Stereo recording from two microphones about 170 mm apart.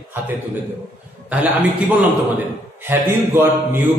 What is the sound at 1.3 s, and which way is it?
A man's voice, 10° right (ahead or behind).